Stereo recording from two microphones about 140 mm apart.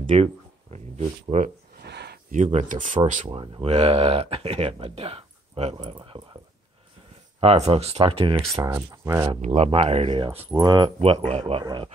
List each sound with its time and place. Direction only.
0.1 s a sound: 50° right (ahead or behind)
2.3 s speech: 60° right (ahead or behind)
3.3 s speech: 40° right (ahead or behind)
7.3 s speech: 45° right (ahead or behind)
8.5 s speech: 20° right (ahead or behind)
9.4 s speech: 50° right (ahead or behind); by 10.9 s 30° right (ahead or behind)
11.2 s speech: 45° right (ahead or behind)
11.6 s speech: 35° right (ahead or behind)